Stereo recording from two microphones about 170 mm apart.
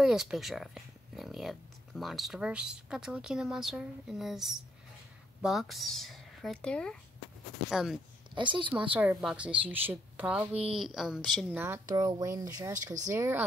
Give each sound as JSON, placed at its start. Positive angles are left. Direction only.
{"t": 0.0, "sound": "speech", "side_deg": 0}
{"t": 8.4, "sound": "a woman's voice", "side_deg": -30}
{"t": 8.9, "sound": "a woman's voice", "side_deg": -10}